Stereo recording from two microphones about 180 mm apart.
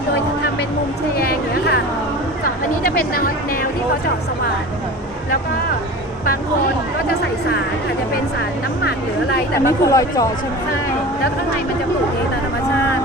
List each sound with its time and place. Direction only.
1.1 s a sound: 55° left (ahead or behind)
2.8 s speech: 55° left (ahead or behind)
9.6 s speech: 20° left (ahead or behind)